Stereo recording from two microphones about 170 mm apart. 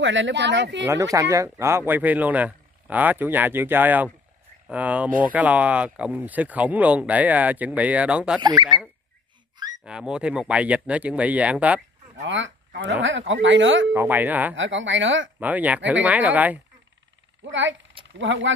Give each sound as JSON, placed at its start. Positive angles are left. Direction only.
{"t": 0.0, "sound": "speech", "side_deg": -90}
{"t": 0.8, "sound": "speech", "side_deg": -20}
{"t": 8.4, "sound": "speech", "side_deg": -25}
{"t": 9.8, "sound": "speech", "side_deg": -5}
{"t": 12.2, "sound": "speech", "side_deg": -90}
{"t": 13.9, "sound": "speech", "side_deg": -10}
{"t": 14.5, "sound": "speech", "side_deg": -90}
{"t": 15.3, "sound": "speech", "side_deg": -10}
{"t": 17.5, "sound": "speech", "side_deg": -90}